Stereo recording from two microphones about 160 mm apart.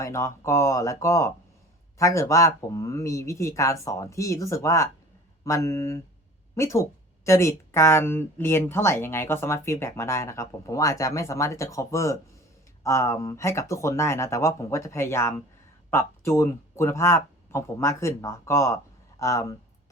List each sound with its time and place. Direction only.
0.0 s speech: 20° left (ahead or behind)